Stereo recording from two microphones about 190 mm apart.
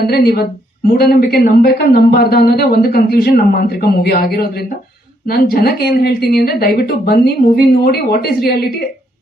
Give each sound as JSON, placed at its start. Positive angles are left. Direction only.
{"t": 0.0, "sound": "a woman's voice", "side_deg": 55}